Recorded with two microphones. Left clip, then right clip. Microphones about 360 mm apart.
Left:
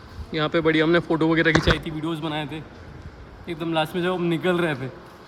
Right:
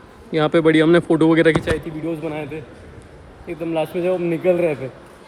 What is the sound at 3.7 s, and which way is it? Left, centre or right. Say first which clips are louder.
Speech: right 4 dB; left.